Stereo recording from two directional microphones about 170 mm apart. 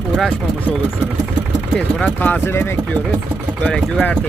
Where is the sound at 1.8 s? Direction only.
10° left (ahead or behind).